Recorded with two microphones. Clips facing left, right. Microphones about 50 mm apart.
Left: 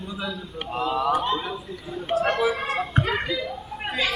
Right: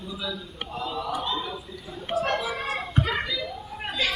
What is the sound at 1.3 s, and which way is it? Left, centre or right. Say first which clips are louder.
Speech: left 4 dB; left.